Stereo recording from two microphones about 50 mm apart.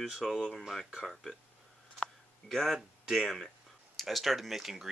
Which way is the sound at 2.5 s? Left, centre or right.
Centre.